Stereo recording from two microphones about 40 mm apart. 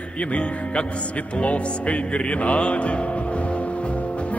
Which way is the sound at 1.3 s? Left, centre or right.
Left.